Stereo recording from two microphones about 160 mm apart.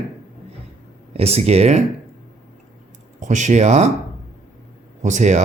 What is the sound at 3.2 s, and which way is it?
Speech, 50° right (ahead or behind).